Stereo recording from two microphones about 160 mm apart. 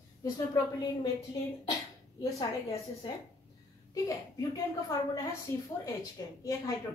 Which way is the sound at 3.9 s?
20° left (ahead or behind).